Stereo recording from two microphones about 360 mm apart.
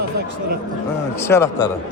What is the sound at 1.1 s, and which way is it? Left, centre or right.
Speech, centre.